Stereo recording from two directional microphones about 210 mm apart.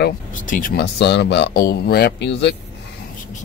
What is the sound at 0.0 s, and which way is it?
Speech, 40° left (ahead or behind).